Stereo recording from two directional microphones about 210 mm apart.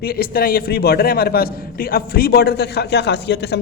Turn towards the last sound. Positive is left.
turn(degrees=55)  # may be behind; listen again after turning